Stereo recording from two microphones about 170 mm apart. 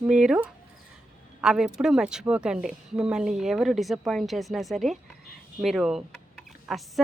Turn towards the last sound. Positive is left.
turn(degrees=0)  # may be behind; listen again after turning